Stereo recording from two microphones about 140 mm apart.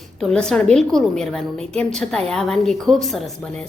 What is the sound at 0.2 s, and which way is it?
A woman's voice, 5° left (ahead or behind).